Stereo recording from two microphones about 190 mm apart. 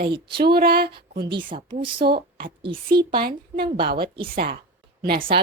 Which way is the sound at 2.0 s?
55° right (ahead or behind).